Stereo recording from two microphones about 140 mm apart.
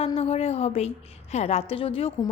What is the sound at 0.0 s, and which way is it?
A woman's voice, 45° left (ahead or behind).